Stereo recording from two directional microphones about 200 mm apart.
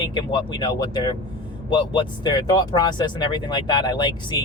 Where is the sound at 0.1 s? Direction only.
25° left (ahead or behind).